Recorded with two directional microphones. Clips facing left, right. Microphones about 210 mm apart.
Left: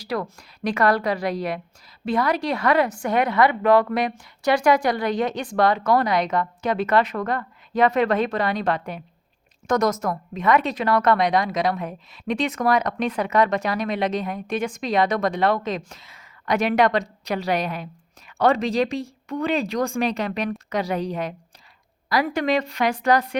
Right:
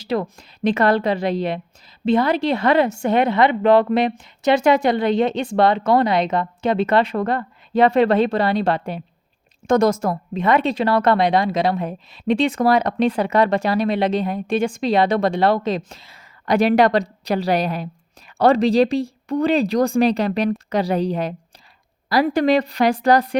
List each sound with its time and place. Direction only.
0.0 s speech: 25° right (ahead or behind)